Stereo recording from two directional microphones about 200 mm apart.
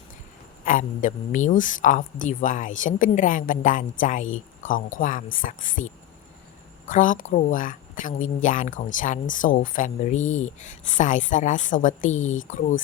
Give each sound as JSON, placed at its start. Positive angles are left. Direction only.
{"t": 0.6, "sound": "speech", "side_deg": 40}